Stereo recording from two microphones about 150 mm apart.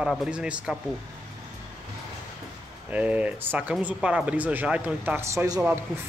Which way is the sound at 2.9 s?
10° right (ahead or behind).